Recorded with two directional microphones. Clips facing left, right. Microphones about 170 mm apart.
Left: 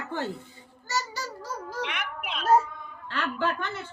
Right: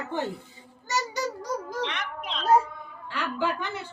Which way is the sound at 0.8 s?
20° right (ahead or behind).